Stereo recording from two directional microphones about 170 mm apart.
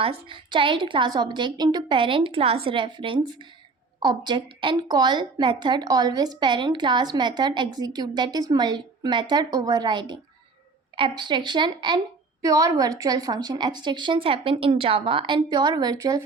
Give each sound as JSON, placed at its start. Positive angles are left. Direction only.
{"t": 0.0, "sound": "a woman's voice", "side_deg": -30}